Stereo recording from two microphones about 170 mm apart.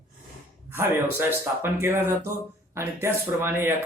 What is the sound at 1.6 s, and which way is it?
Speech, 15° right (ahead or behind).